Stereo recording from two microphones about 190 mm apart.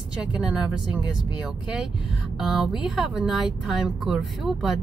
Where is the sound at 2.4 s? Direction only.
Centre (ahead or behind).